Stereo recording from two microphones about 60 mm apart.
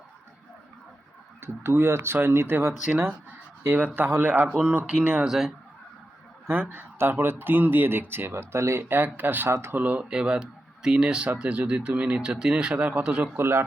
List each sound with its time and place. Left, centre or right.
1.4 s speech: right
5.2 s speech: centre
6.5 s speech: right
8.8 s speech: right
9.5 s speech: right
9.7 s speech: right
10.1 s speech: centre
12.3 s speech: centre
13.1 s speech: centre
13.3 s speech: right